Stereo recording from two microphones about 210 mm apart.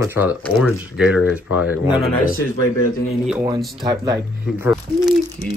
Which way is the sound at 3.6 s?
Centre (ahead or behind).